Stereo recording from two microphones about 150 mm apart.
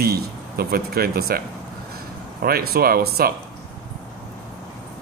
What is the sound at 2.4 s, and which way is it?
Speech, 90° right.